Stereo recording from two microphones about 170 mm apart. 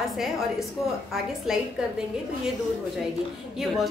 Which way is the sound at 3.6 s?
5° right (ahead or behind).